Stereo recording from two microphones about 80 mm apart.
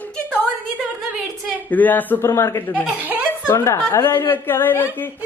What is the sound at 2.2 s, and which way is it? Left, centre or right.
A woman's voice, left.